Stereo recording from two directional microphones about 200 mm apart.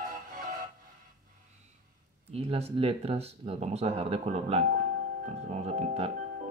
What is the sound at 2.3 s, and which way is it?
Speech, 30° right (ahead or behind).